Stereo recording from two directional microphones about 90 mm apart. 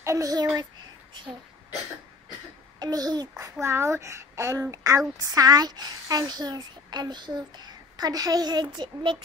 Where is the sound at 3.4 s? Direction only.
30° right (ahead or behind).